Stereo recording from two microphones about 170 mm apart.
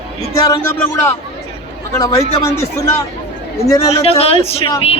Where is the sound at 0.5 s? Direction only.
15° left (ahead or behind).